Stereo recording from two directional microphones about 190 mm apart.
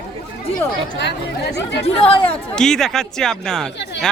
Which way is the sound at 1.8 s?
30° left (ahead or behind).